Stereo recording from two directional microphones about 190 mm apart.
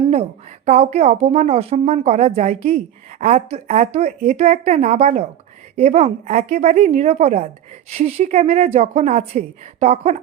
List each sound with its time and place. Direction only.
0.1 s a woman's voice: 35° right (ahead or behind)